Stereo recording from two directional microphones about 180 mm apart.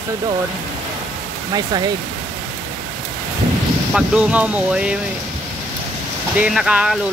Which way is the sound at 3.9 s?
5° right (ahead or behind).